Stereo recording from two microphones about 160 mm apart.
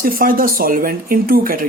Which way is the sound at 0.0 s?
60° right (ahead or behind).